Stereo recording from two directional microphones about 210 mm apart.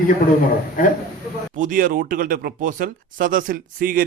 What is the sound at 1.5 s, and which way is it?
Speech, 40° right (ahead or behind).